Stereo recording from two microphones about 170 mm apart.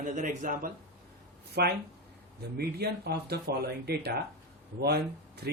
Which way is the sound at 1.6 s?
70° right (ahead or behind).